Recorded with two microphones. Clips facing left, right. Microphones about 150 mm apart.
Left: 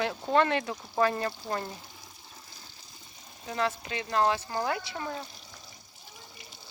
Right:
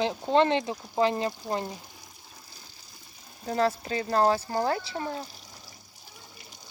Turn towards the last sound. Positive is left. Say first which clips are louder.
# right 1 dB
turn(degrees=0)  # may be behind; listen again after turning